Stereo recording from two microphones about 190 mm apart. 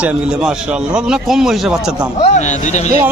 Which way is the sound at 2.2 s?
40° left (ahead or behind).